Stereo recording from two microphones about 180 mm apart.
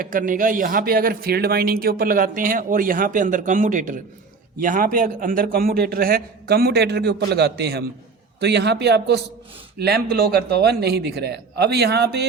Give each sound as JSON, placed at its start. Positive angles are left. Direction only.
{"t": 0.0, "sound": "a man's voice", "side_deg": -50}